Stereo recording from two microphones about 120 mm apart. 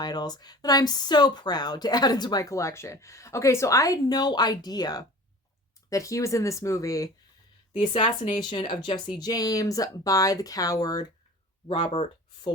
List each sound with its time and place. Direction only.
0.0 s speech: 35° left (ahead or behind)
7.8 s speech: 50° left (ahead or behind); by 11.0 s 30° left (ahead or behind)
11.7 s speech: 45° left (ahead or behind)